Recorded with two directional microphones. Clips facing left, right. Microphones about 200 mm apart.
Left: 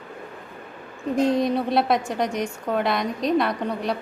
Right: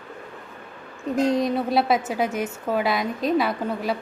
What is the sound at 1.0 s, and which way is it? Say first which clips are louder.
A woman's voice: left 1 dB; centre (ahead or behind).